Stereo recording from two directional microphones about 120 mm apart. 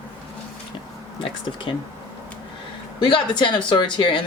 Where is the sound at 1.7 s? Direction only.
45° left (ahead or behind).